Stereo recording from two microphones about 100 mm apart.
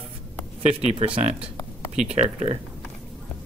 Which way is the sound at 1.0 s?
65° right (ahead or behind).